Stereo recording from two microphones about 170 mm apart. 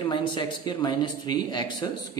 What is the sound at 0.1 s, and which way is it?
Speech, 30° left (ahead or behind).